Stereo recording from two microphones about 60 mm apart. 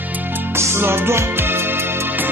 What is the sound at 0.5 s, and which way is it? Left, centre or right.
Music, right.